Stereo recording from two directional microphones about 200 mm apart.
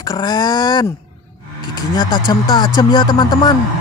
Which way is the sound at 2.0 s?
25° left (ahead or behind).